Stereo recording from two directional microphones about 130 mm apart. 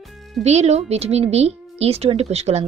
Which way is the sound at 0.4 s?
55° right (ahead or behind).